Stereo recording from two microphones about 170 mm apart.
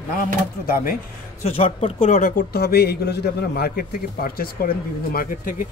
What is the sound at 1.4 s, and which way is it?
A man's voice, 35° left (ahead or behind).